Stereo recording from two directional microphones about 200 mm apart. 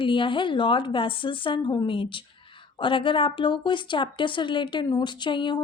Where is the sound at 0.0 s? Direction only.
25° left (ahead or behind).